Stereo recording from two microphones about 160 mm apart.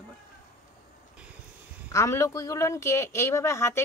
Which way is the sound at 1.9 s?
20° left (ahead or behind).